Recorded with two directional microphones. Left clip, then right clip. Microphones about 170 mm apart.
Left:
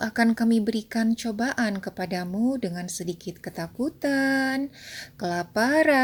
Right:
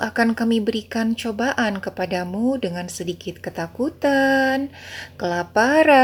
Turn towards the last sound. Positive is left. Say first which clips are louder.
# right 6 dB
turn(degrees=25)  # may be behind; listen again after turning